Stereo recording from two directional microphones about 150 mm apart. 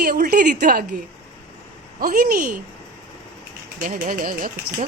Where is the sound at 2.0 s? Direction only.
75° right (ahead or behind).